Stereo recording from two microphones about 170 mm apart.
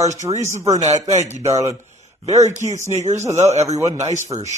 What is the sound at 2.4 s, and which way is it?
Mantra, 45° right (ahead or behind).